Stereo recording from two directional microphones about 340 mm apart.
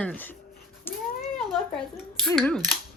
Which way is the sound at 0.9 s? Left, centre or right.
Centre.